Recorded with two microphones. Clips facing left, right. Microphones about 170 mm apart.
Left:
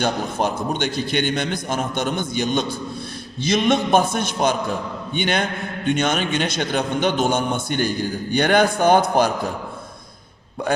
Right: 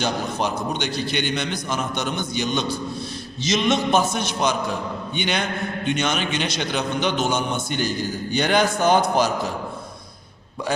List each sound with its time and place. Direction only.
0.0 s a man's voice: 50° left (ahead or behind)